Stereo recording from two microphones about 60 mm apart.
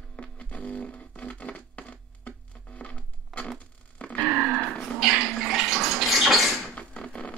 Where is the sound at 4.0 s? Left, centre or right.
Left.